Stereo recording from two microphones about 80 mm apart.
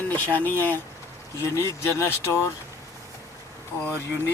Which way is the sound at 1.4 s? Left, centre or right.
Left.